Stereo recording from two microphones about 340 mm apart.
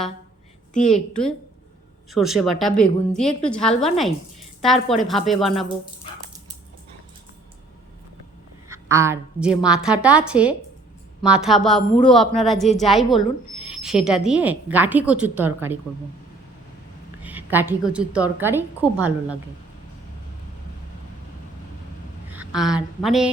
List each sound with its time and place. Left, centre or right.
0.7 s a woman's voice: left
2.0 s a woman's voice: centre
8.7 s a woman's voice: centre
17.2 s a woman's voice: centre
22.3 s a sound: centre
23.0 s a woman's voice: centre